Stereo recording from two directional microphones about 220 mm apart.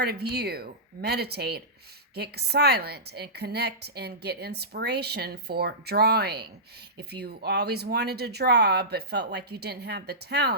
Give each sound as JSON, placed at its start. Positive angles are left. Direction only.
{"t": 0.0, "sound": "a woman's voice", "side_deg": -45}